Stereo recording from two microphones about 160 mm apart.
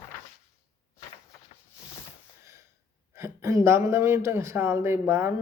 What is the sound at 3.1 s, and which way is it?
A man's voice, 15° right (ahead or behind).